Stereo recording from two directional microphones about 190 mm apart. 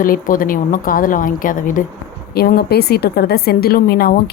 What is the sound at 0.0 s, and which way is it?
A woman's voice, 45° left (ahead or behind).